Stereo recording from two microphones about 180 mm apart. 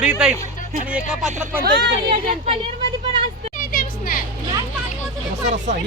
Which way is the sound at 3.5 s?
50° left (ahead or behind).